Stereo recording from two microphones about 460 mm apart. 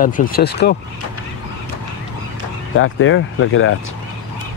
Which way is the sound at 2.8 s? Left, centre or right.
Left.